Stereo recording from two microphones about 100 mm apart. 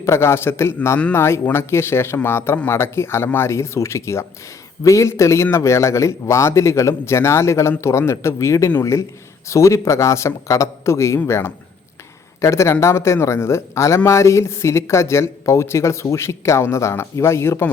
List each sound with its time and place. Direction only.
0.0 s a man's voice: 25° left (ahead or behind)